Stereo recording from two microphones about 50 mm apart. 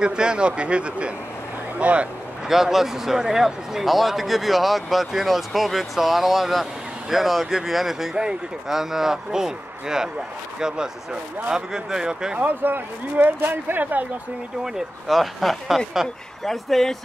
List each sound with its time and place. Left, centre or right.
0.0 s speech: centre
2.4 s a man's voice: centre
11.5 s a man's voice: centre
12.4 s speech: right
14.6 s speech: centre